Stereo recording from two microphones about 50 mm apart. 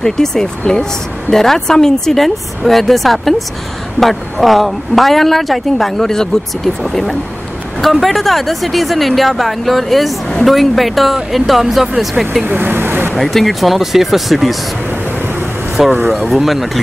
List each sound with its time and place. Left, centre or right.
0.0 s speech: centre
12.4 s speech: right
13.1 s speech: centre
16.1 s speech: centre